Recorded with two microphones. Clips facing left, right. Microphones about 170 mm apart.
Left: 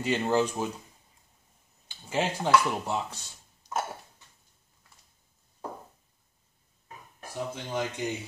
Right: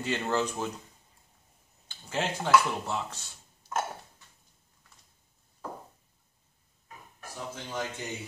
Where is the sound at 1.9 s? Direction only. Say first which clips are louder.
Left 3 dB; 10° left (ahead or behind).